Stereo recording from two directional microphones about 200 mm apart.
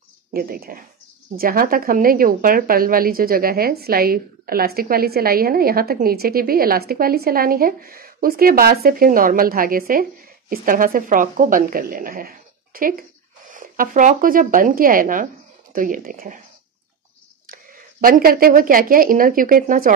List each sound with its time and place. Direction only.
0.3 s a woman's voice: 50° right (ahead or behind)
18.0 s a woman's voice: 45° right (ahead or behind)